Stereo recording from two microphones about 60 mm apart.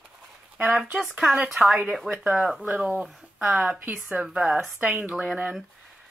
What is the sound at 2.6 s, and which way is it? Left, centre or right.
Speech, centre.